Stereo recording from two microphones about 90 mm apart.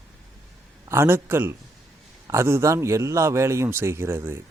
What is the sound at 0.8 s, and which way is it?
A man's voice, 30° right (ahead or behind).